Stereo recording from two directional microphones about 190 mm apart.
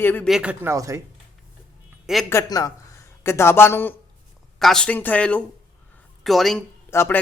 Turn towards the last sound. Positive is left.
turn(degrees=15)  # may be behind; listen again after turning